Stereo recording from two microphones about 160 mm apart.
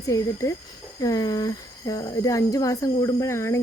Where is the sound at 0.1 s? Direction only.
20° left (ahead or behind).